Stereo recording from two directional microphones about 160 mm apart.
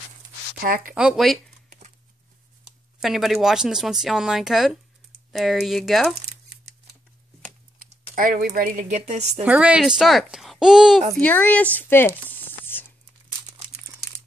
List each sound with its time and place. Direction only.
0.6 s a woman's voice: 60° right (ahead or behind)
0.9 s speech: 5° right (ahead or behind)
3.0 s speech: centre (ahead or behind)
8.1 s a woman's voice: 60° right (ahead or behind)
9.4 s speech: 10° right (ahead or behind)
11.1 s speech: 10° left (ahead or behind)
12.3 s a sound: 10° left (ahead or behind)